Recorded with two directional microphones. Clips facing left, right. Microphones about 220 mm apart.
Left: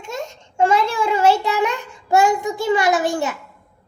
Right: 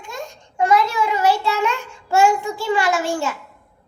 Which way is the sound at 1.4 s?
15° left (ahead or behind).